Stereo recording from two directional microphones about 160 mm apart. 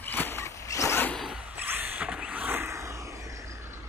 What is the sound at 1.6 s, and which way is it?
Vehicle, 10° right (ahead or behind).